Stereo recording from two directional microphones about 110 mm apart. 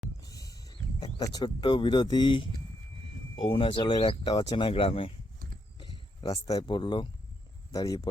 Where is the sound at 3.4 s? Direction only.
55° left (ahead or behind).